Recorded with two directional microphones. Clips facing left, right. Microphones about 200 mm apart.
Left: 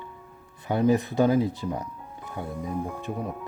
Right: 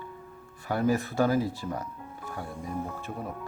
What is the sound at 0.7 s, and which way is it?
Speech, 20° left (ahead or behind).